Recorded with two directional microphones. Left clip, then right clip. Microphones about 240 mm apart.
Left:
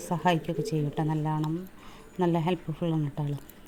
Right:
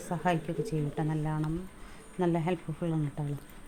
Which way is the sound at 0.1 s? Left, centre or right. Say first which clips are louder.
Left 4 dB; centre.